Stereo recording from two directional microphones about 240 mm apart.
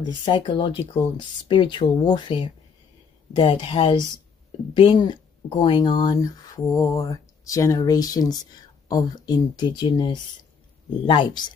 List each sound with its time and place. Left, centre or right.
0.0 s speech: centre